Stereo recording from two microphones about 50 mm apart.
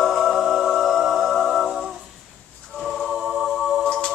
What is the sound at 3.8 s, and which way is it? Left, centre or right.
Music, centre.